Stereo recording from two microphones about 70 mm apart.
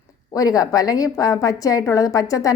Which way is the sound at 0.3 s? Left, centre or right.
Left.